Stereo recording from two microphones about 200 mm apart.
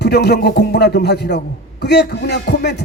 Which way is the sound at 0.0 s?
55° left (ahead or behind).